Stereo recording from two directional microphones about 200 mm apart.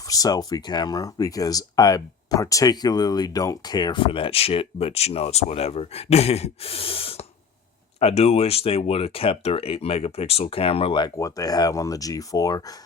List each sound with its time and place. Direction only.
0.1 s speech: 20° left (ahead or behind)